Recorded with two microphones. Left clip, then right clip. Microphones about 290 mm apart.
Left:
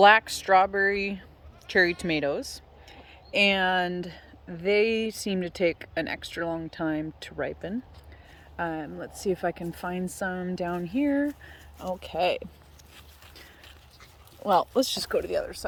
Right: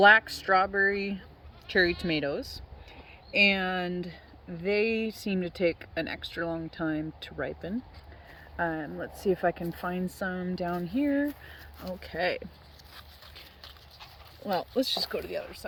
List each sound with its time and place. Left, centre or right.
0.0 s speech: centre
3.3 s speech: centre
14.4 s speech: centre